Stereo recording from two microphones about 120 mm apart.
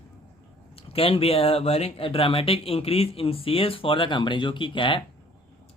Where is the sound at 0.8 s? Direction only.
50° left (ahead or behind).